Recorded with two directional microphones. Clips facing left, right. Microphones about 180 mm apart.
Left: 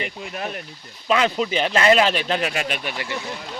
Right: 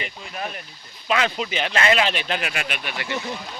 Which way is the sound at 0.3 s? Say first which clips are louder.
Even; 50° left (ahead or behind).